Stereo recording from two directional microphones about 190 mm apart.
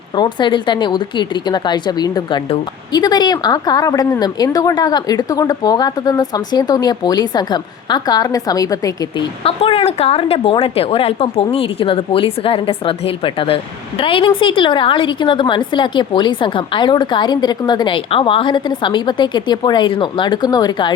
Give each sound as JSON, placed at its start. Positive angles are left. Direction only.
{"t": 0.2, "sound": "a woman's voice", "side_deg": 25}
{"t": 9.4, "sound": "a woman's voice", "side_deg": 30}